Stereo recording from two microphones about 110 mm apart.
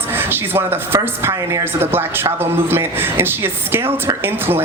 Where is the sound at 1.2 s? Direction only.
30° right (ahead or behind).